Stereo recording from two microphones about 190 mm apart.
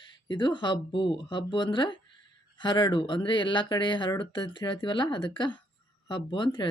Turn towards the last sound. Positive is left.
turn(degrees=25)  # may be behind; listen again after turning